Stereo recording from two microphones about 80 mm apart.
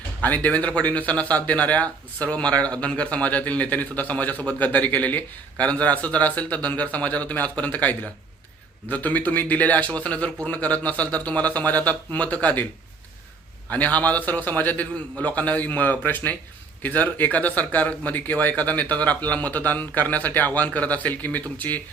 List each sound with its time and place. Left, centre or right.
0.2 s speech: left
13.7 s speech: centre